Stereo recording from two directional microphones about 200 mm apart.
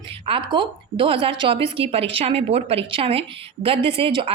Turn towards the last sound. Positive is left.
turn(degrees=-25)  # may be behind; listen again after turning